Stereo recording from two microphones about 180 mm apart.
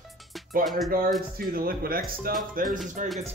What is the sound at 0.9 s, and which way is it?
Speech, 55° right (ahead or behind).